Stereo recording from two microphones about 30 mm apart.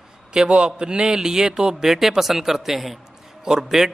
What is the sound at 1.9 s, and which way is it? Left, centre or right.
A man's voice, centre.